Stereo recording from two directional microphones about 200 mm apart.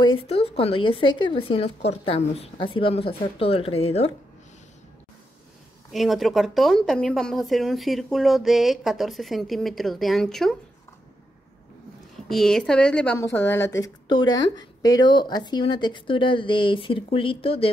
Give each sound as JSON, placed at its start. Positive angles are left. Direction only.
{"t": 0.3, "sound": "a woman's voice", "side_deg": 30}
{"t": 5.9, "sound": "speech", "side_deg": 0}
{"t": 12.3, "sound": "a woman's voice", "side_deg": 0}